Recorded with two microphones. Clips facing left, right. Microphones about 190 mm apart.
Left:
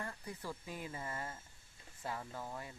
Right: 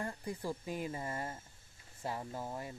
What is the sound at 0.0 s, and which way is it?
Speech, 30° right (ahead or behind).